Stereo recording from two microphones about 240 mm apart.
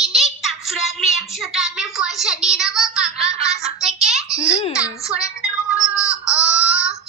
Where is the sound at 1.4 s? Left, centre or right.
Centre.